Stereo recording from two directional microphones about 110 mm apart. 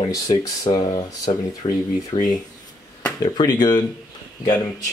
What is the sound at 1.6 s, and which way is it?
Speech, 50° left (ahead or behind).